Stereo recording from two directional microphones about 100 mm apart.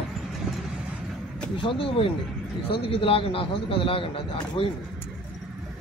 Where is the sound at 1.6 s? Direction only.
65° left (ahead or behind).